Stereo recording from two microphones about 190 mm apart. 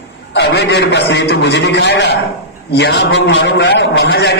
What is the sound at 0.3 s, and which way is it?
A man's voice, 60° left (ahead or behind).